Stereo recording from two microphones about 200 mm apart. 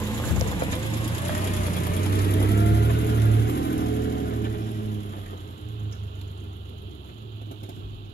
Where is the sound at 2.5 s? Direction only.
55° left (ahead or behind).